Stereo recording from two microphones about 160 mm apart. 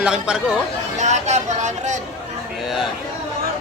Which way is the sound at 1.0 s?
45° right (ahead or behind).